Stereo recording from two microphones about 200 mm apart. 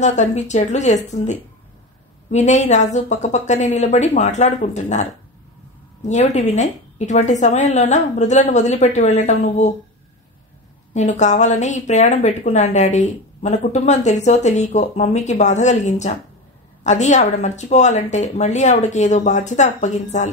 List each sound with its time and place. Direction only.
0.0 s a woman's voice: 35° left (ahead or behind)
6.0 s a woman's voice: 35° left (ahead or behind)
10.9 s a woman's voice: 35° left (ahead or behind)